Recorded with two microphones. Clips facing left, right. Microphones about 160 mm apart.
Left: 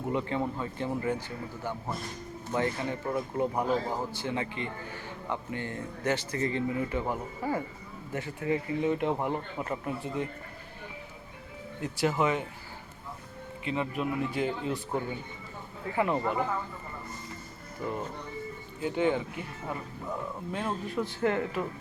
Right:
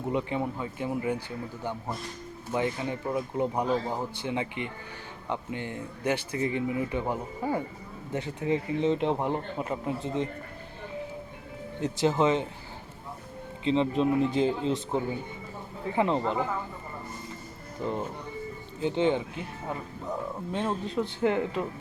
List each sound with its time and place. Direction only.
0.1 s speech: 15° right (ahead or behind)
2.5 s speech: 15° right (ahead or behind)
11.8 s speech: 25° right (ahead or behind)
13.7 s speech: 25° right (ahead or behind)
17.8 s speech: 25° right (ahead or behind)